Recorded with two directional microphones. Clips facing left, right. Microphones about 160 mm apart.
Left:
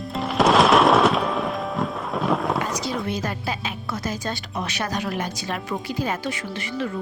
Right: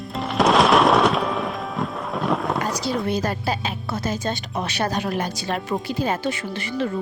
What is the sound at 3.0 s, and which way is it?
Speech, 35° right (ahead or behind).